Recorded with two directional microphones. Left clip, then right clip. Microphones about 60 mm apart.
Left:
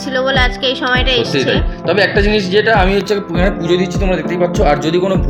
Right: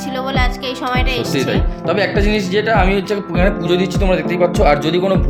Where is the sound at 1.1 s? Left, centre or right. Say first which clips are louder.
Left 5 dB; centre.